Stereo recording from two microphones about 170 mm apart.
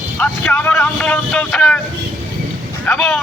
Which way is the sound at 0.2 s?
10° left (ahead or behind).